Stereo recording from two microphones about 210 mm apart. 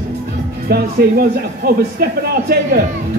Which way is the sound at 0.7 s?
45° right (ahead or behind).